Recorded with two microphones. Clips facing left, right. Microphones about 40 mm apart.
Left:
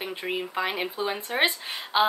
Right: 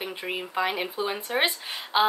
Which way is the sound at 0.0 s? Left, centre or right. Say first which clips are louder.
Left 1 dB; centre.